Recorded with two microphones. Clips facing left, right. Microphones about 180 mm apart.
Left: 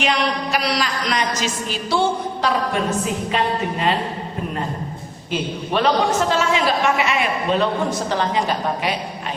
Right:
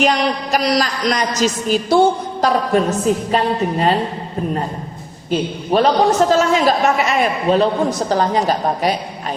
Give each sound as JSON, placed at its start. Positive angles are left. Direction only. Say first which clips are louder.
{"t": 0.0, "sound": "a woman's voice", "louder": "right 4 dB", "side_deg": -40}
{"t": 5.7, "sound": "a woman's voice", "louder": "right 5 dB", "side_deg": -40}